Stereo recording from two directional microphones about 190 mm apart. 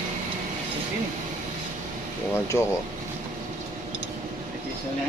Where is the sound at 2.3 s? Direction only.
15° left (ahead or behind).